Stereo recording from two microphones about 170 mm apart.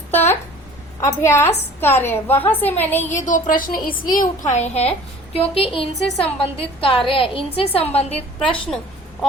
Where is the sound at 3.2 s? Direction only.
50° left (ahead or behind).